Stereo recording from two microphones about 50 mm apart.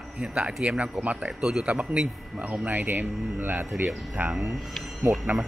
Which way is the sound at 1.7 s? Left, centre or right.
Right.